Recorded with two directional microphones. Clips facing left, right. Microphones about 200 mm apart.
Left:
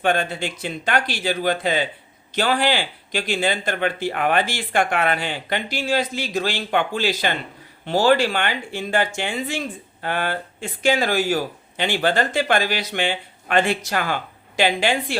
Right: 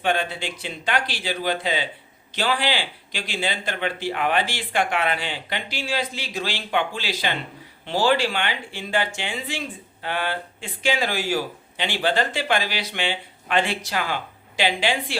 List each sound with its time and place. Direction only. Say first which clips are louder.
0.0 s speech: left 3 dB; 45° left (ahead or behind)